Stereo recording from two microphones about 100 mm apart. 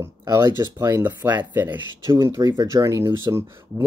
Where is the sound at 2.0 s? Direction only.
30° right (ahead or behind).